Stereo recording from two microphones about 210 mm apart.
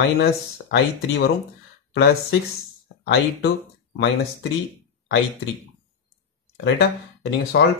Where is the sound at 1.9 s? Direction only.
50° left (ahead or behind).